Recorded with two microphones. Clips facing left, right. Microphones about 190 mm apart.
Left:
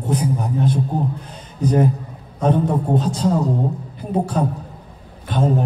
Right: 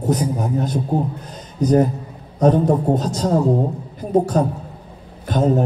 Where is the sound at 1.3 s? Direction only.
40° right (ahead or behind).